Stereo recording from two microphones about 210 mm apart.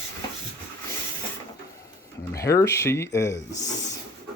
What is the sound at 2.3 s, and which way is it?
Speech, 15° left (ahead or behind).